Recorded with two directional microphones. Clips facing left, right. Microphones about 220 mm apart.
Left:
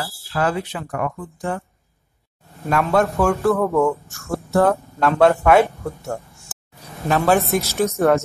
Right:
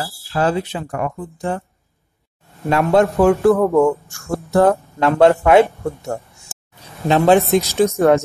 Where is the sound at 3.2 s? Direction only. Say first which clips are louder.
Right 5 dB; 15° right (ahead or behind).